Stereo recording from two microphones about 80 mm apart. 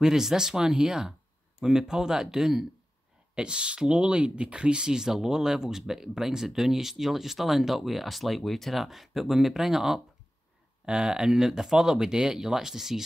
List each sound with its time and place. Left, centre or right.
0.0 s speech: centre